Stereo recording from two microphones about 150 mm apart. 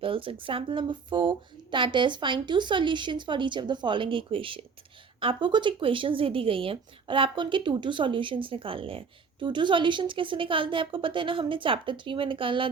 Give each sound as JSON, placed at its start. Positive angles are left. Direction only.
{"t": 0.0, "sound": "a woman's voice", "side_deg": -35}